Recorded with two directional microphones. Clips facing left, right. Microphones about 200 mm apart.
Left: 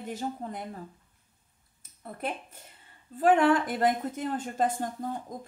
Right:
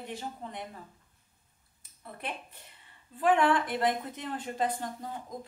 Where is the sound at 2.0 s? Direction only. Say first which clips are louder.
Left 5 dB; 45° left (ahead or behind).